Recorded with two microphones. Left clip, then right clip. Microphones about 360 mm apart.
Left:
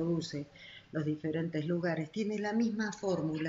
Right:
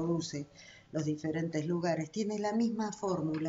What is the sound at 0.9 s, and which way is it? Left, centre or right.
Speech, right.